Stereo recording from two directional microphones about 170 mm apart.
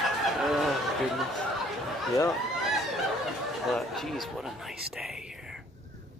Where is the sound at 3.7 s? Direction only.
Centre (ahead or behind).